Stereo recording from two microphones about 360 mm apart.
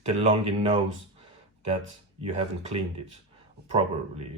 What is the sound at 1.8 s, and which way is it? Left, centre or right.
Speech, centre.